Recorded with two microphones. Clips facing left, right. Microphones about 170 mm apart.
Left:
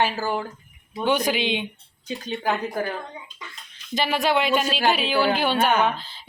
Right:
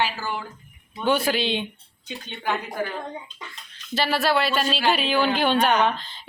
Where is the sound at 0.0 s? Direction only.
40° left (ahead or behind).